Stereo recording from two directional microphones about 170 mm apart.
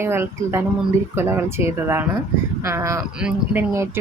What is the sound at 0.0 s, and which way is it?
A woman's voice, 15° right (ahead or behind).